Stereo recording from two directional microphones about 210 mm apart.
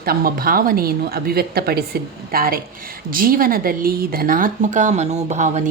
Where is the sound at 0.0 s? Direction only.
45° right (ahead or behind).